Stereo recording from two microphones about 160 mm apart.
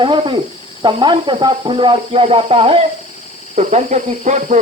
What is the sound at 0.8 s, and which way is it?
Speech, 30° right (ahead or behind).